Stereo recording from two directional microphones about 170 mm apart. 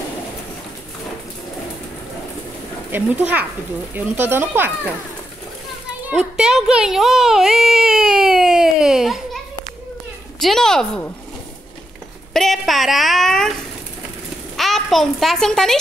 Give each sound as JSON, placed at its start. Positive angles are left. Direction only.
{"t": 2.9, "sound": "speech", "side_deg": -10}
{"t": 6.0, "sound": "music", "side_deg": -5}
{"t": 10.4, "sound": "a woman's voice", "side_deg": 0}
{"t": 12.4, "sound": "a woman's voice", "side_deg": 0}
{"t": 14.6, "sound": "a child's voice", "side_deg": 0}